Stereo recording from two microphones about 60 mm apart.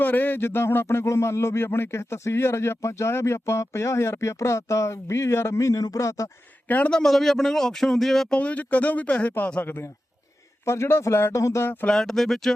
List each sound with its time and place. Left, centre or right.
0.0 s speech: left
6.7 s speech: left
6.9 s speech: centre
8.4 s speech: left
10.7 s speech: left
11.6 s speech: left
11.9 s speech: centre